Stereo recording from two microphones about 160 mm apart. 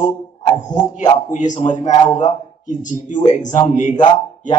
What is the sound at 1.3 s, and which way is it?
A man's voice, 50° left (ahead or behind).